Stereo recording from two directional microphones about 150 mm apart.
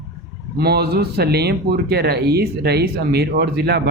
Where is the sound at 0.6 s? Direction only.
90° right.